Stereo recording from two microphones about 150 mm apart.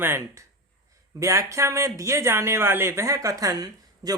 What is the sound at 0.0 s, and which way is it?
Speech, 15° right (ahead or behind).